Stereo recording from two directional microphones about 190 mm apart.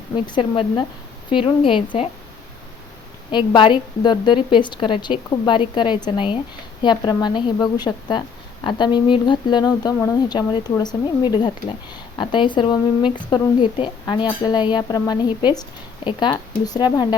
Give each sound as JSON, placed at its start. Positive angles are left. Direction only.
{"t": 0.3, "sound": "speech", "side_deg": 25}
{"t": 3.3, "sound": "speech", "side_deg": 25}